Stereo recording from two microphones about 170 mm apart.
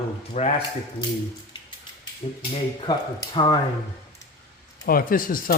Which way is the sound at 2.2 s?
30° left (ahead or behind).